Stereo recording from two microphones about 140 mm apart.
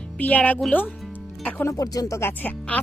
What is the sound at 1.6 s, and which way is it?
Speech, 25° left (ahead or behind).